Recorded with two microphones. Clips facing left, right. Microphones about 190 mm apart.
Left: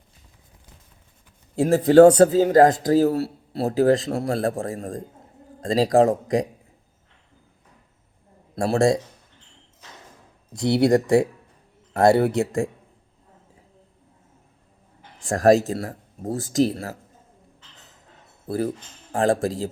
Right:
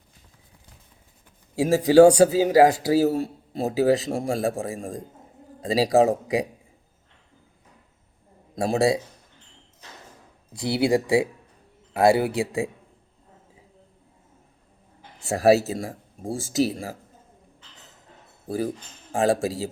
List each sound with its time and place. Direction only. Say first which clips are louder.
1.5 s speech: left 2 dB; 10° right (ahead or behind)
8.5 s speech: left 2 dB; 5° right (ahead or behind)
10.6 s speech: left 4 dB; 5° right (ahead or behind)
15.3 s speech: left 1 dB; 5° right (ahead or behind)
18.4 s speech: left 2 dB; 10° right (ahead or behind)